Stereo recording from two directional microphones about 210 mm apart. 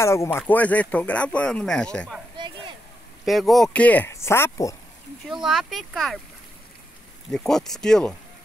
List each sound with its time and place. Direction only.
0.0 s speech: 15° left (ahead or behind)
2.3 s a sound: 20° right (ahead or behind)
3.3 s speech: centre (ahead or behind)
5.2 s speech: centre (ahead or behind)
7.2 s speech: centre (ahead or behind)